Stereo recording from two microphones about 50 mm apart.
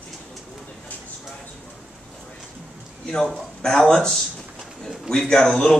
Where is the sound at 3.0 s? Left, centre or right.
Centre.